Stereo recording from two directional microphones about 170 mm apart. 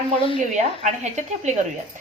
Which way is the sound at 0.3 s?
45° right (ahead or behind).